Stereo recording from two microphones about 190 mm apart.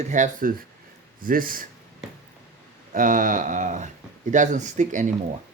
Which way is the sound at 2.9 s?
45° right (ahead or behind).